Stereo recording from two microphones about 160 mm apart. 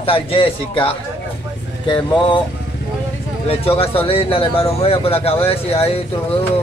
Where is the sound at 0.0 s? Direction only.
35° left (ahead or behind).